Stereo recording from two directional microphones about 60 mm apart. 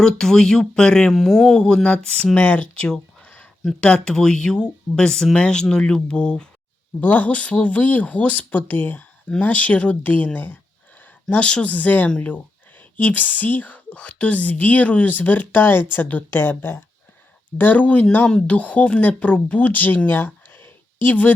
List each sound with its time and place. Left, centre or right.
0.0 s speech: centre
1.1 s speech: centre
7.0 s speech: left
11.0 s a sound: left
11.7 s speech: left
17.6 s speech: left